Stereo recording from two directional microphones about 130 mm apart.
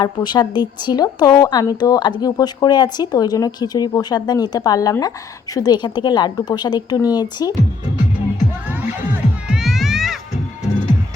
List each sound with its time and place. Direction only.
0.0 s a woman's voice: 35° left (ahead or behind)
8.6 s music: 10° right (ahead or behind)
9.6 s music: centre (ahead or behind)